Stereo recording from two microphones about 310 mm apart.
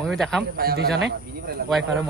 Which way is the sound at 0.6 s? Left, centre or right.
Right.